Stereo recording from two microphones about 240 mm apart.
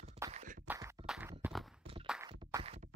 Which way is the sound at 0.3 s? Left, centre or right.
Right.